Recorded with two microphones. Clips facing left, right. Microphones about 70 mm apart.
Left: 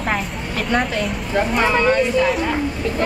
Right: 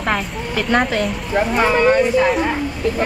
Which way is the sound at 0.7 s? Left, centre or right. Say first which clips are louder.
Right 3 dB; right.